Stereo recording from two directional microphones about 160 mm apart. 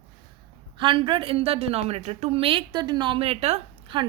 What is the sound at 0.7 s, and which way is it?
A woman's voice, 30° right (ahead or behind).